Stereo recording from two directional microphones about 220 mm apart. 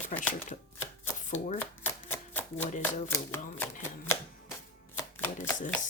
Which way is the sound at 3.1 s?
10° left (ahead or behind).